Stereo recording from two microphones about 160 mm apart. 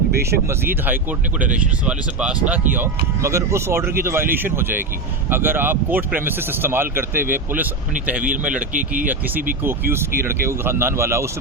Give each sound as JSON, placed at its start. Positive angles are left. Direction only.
{"t": 0.2, "sound": "speech", "side_deg": -15}
{"t": 2.7, "sound": "speech", "side_deg": -20}
{"t": 8.2, "sound": "speech", "side_deg": -55}
{"t": 9.6, "sound": "speech", "side_deg": -15}